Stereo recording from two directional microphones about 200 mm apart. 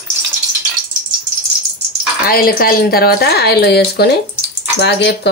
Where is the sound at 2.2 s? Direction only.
45° left (ahead or behind).